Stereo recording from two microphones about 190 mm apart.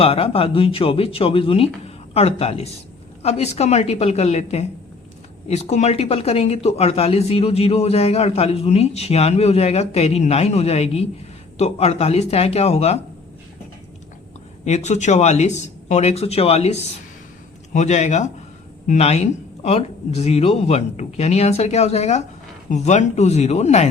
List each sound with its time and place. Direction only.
0.0 s speech: 30° left (ahead or behind)
14.6 s speech: 35° left (ahead or behind)